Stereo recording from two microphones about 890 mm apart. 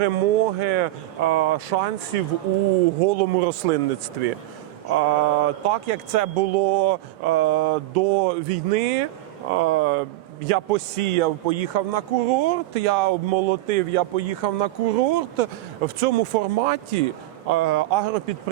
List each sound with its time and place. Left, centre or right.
0.0 s a man's voice: right
4.9 s a man's voice: right
16.0 s a man's voice: right